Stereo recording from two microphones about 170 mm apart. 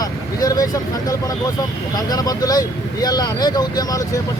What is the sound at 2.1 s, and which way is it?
Speech, 20° left (ahead or behind).